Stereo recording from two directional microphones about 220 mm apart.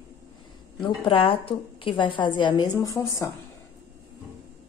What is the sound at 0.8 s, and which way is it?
A woman's voice, 25° left (ahead or behind).